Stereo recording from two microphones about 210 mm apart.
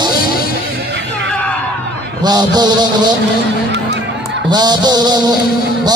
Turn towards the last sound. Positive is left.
turn(degrees=-20)  # may be behind; listen again after turning